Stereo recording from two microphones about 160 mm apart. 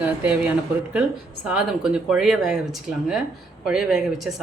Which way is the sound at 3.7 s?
5° right (ahead or behind).